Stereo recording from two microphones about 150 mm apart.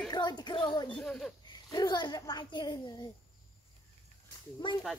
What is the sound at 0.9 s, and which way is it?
Speech, 5° left (ahead or behind).